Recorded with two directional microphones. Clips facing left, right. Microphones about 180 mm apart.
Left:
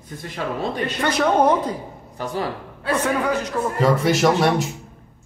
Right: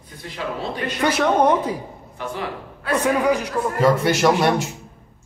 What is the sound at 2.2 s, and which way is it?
Speech, 40° left (ahead or behind).